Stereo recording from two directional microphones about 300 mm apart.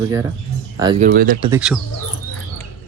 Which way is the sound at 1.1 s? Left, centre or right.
Right.